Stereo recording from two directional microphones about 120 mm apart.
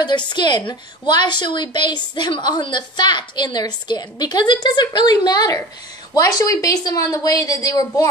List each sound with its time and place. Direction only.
0.3 s a woman's voice: 40° left (ahead or behind)